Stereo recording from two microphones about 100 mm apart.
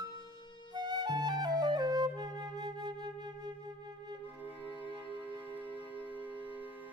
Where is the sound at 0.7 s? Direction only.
45° right (ahead or behind).